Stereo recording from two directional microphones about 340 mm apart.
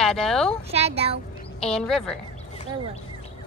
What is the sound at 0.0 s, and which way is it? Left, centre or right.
Speech, centre.